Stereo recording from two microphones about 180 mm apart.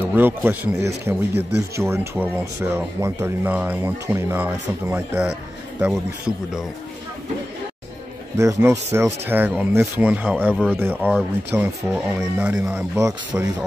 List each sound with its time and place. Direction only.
0.0 s a man's voice: 10° right (ahead or behind)
8.4 s speech: 15° right (ahead or behind)